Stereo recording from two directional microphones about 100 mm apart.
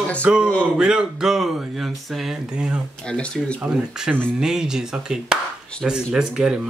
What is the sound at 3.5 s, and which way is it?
Speech, 10° right (ahead or behind).